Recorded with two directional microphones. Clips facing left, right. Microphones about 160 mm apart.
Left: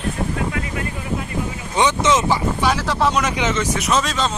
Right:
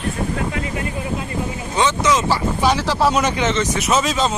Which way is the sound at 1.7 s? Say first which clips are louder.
Left 1 dB; 20° left (ahead or behind).